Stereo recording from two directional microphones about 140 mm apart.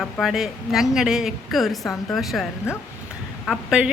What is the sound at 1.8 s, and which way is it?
Speech, 20° left (ahead or behind).